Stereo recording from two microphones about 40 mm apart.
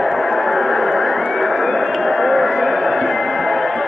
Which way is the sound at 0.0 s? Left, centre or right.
Centre.